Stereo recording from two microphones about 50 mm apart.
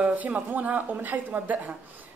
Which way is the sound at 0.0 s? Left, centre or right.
Right.